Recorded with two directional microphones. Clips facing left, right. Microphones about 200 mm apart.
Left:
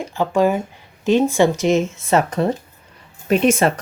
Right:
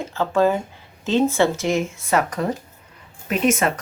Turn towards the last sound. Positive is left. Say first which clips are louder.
# left 4 dB
turn(degrees=30)  # may be behind; listen again after turning